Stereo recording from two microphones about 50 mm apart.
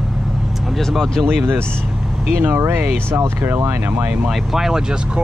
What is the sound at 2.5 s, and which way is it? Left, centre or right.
Speech, right.